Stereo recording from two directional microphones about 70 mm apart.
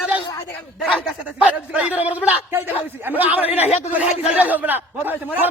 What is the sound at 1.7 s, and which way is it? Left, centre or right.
Speech, centre.